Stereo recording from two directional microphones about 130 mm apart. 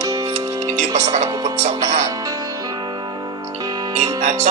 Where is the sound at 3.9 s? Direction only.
60° right (ahead or behind).